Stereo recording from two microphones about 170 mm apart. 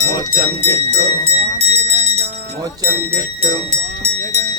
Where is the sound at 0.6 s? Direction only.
35° right (ahead or behind).